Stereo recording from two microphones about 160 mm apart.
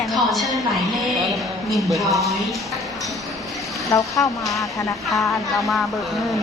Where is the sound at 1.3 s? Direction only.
Centre (ahead or behind).